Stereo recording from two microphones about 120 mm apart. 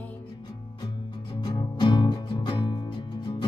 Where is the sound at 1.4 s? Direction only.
40° left (ahead or behind).